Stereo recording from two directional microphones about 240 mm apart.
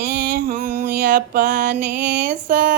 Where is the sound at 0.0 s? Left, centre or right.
Right.